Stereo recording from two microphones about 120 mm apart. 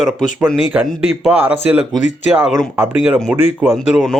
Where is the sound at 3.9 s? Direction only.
5° left (ahead or behind).